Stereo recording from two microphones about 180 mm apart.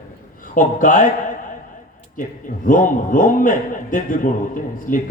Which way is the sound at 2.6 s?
45° left (ahead or behind).